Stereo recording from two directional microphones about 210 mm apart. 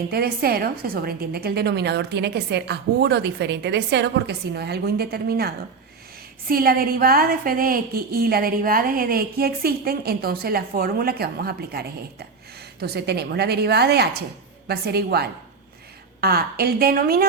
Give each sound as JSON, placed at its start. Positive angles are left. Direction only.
{"t": 0.1, "sound": "a woman's voice", "side_deg": -45}